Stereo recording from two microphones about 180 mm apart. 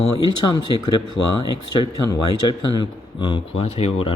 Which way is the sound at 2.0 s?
20° left (ahead or behind).